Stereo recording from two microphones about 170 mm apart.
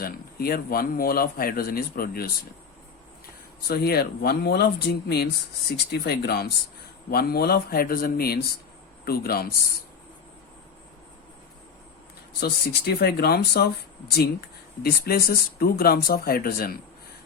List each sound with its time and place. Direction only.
0.0 s a man's voice: 60° left (ahead or behind)
3.7 s a man's voice: 65° left (ahead or behind)
12.4 s speech: 70° left (ahead or behind)
14.8 s a man's voice: 65° left (ahead or behind)